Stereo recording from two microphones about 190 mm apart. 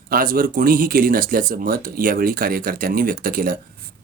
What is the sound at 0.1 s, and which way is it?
Speech, 50° right (ahead or behind).